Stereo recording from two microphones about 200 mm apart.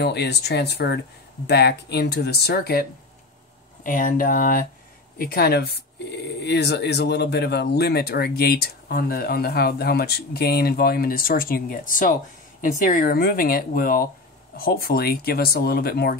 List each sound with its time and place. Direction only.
0.0 s speech: 55° left (ahead or behind)